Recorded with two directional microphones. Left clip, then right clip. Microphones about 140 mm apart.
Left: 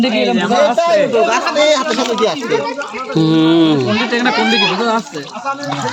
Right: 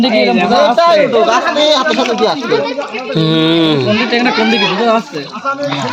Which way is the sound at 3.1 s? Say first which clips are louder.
Even; 35° left (ahead or behind).